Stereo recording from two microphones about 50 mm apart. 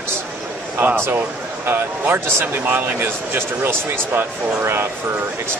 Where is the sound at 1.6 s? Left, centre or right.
Right.